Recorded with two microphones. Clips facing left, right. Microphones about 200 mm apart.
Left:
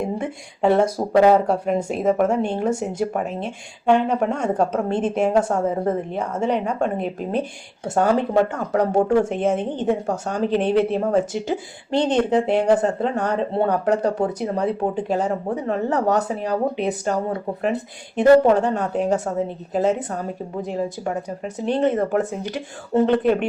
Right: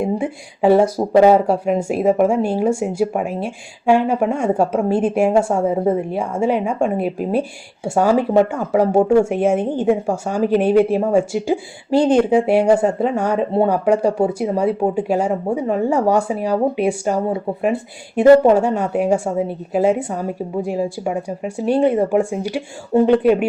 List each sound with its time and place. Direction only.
0.0 s speech: 5° right (ahead or behind)
18.2 s speech: 10° right (ahead or behind)